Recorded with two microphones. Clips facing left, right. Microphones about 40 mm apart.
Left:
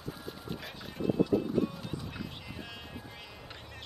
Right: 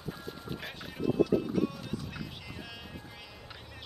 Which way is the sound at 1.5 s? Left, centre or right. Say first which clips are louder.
Even; centre.